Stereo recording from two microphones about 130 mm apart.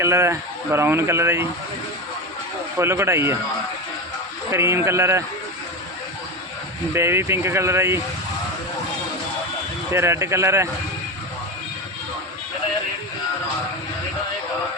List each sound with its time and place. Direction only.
0.0 s speech: 20° right (ahead or behind)
2.7 s speech: 20° right (ahead or behind)
4.5 s speech: 20° right (ahead or behind)
6.9 s speech: 20° right (ahead or behind)
9.9 s speech: 20° right (ahead or behind)